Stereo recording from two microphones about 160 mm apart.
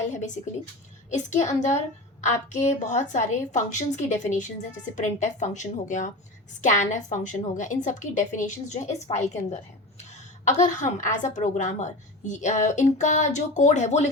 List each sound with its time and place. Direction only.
1.1 s a woman's voice: 45° left (ahead or behind)